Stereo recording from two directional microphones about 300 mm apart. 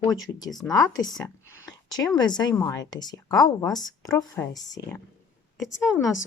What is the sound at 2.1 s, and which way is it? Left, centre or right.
Speech, centre.